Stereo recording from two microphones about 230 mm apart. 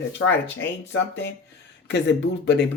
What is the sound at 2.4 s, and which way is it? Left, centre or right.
Speech, left.